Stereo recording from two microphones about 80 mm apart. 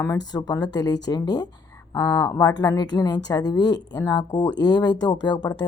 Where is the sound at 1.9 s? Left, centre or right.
Left.